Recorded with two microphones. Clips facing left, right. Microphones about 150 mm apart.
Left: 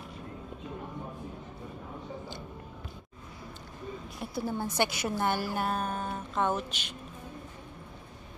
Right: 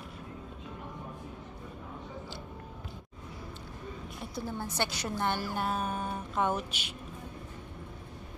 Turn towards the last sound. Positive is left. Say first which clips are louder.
# left 1 dB
turn(degrees=-10)  # may be behind; listen again after turning